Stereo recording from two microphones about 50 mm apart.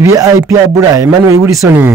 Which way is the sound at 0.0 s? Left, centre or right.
Right.